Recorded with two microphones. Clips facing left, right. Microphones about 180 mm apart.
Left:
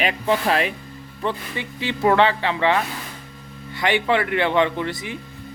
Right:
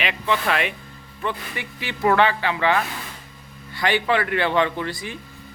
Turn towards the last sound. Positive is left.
turn(degrees=20)  # may be behind; listen again after turning